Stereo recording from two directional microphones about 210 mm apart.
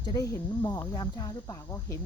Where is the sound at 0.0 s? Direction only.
15° left (ahead or behind).